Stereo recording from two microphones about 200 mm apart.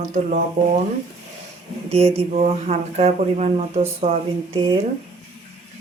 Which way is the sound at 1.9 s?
30° right (ahead or behind).